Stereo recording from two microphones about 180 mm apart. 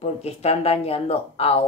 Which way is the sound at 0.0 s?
35° left (ahead or behind).